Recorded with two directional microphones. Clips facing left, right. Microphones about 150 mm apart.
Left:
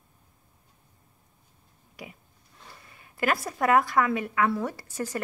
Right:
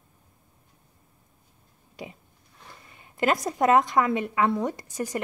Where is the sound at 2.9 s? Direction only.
20° right (ahead or behind).